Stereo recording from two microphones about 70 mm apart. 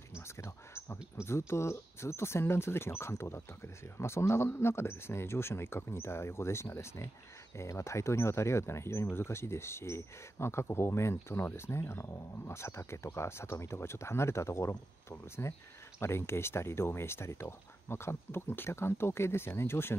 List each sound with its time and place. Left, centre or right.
0.4 s speech: left